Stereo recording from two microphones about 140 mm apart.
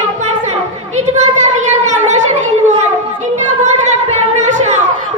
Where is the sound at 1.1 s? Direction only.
55° right (ahead or behind).